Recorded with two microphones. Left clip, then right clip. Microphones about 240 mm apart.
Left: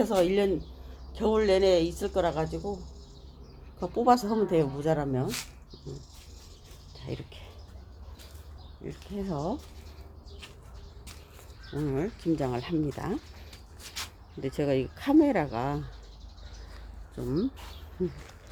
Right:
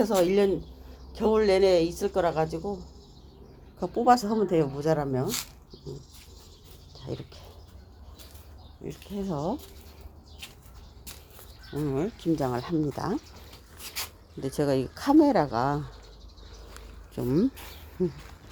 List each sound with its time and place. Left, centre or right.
0.0 s speech: centre
3.8 s speech: centre
7.0 s speech: centre
8.8 s speech: centre
11.7 s speech: centre
14.4 s speech: centre
17.2 s speech: right